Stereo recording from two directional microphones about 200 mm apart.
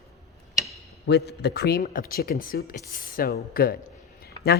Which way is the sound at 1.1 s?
55° left (ahead or behind).